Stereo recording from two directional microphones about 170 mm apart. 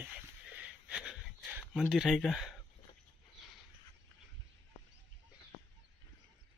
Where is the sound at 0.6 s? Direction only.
5° right (ahead or behind).